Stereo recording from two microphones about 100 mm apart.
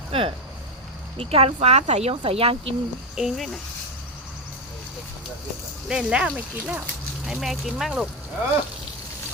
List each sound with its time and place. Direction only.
0.1 s speech: 65° right (ahead or behind)
1.2 s speech: 85° right; by 2.7 s 70° right (ahead or behind)
3.2 s speech: centre (ahead or behind)
5.9 s speech: 5° right (ahead or behind)
7.3 s speech: centre (ahead or behind)